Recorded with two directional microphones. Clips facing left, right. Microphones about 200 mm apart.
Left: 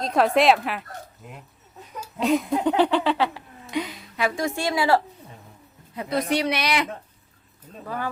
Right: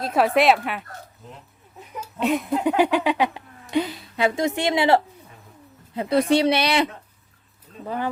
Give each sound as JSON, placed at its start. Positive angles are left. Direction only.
{"t": 0.0, "sound": "speech", "side_deg": -5}
{"t": 1.2, "sound": "speech", "side_deg": 10}
{"t": 2.0, "sound": "a sound", "side_deg": 0}
{"t": 2.6, "sound": "a sound", "side_deg": -10}
{"t": 3.7, "sound": "a woman's voice", "side_deg": -30}
{"t": 7.9, "sound": "a woman's voice", "side_deg": -20}